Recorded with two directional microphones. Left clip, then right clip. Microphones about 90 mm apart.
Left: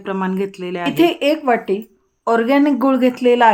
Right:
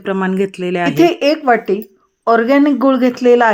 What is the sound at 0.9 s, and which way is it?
Speech, 25° right (ahead or behind).